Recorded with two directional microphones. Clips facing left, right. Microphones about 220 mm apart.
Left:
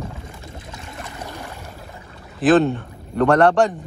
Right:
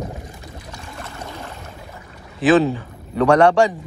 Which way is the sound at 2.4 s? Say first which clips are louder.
Even; centre (ahead or behind).